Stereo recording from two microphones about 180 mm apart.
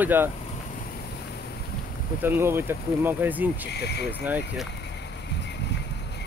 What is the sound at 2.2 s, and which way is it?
Speech, 10° right (ahead or behind).